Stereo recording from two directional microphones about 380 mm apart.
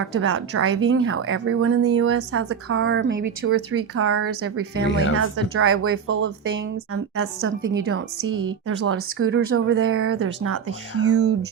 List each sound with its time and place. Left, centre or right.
0.0 s a woman's voice: right
4.9 s speech: left
5.1 s a woman's voice: right